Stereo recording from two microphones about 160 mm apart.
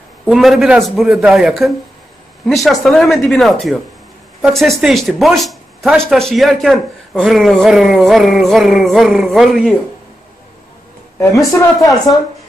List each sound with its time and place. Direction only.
0.3 s a man's voice: centre (ahead or behind)
11.8 s speech: 20° left (ahead or behind)